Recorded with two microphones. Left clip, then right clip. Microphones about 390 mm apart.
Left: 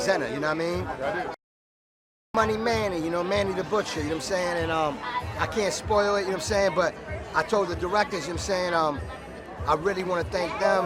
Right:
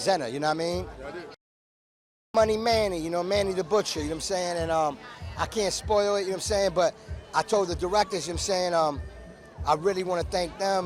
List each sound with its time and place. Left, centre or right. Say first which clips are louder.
0.0 s speech: even; right
2.3 s speech: right 2 dB; right
3.2 s a man's voice: right 1 dB; right
5.4 s speech: right 1 dB; right
7.3 s speech: even; right